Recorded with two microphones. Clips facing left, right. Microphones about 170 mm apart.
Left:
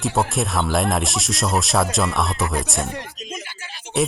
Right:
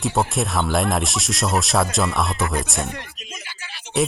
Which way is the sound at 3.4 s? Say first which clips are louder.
Left 1 dB; 50° left (ahead or behind).